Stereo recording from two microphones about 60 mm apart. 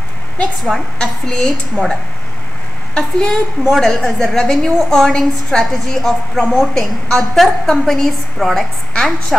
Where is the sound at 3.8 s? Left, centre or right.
Centre.